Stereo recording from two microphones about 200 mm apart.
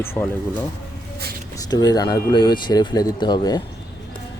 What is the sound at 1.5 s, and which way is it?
Speech, 20° left (ahead or behind).